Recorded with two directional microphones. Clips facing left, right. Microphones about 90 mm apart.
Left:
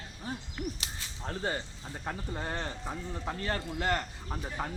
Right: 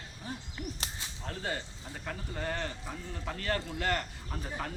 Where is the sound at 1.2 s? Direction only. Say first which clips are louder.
Left 3 dB; 30° left (ahead or behind).